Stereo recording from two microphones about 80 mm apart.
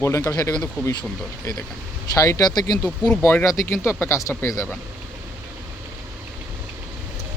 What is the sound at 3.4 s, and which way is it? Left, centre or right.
Speech, left.